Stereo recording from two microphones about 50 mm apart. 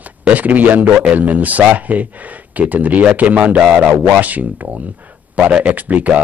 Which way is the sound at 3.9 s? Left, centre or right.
Right.